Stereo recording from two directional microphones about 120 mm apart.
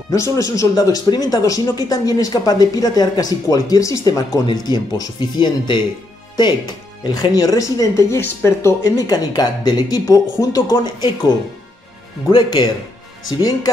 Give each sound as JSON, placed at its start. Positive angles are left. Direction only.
{"t": 0.1, "sound": "speech", "side_deg": 25}
{"t": 7.2, "sound": "speech", "side_deg": 30}
{"t": 12.4, "sound": "speech", "side_deg": 35}